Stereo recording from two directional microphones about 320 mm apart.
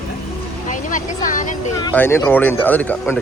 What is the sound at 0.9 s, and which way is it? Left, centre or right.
Speech, left.